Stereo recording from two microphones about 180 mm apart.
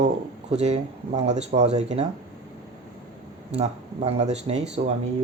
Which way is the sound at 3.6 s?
35° right (ahead or behind).